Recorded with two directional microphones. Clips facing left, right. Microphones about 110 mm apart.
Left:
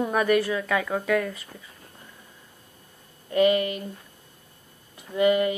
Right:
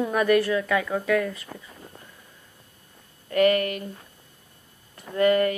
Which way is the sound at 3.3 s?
20° left (ahead or behind).